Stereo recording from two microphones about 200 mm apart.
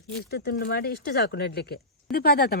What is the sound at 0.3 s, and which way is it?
Speech, 55° left (ahead or behind).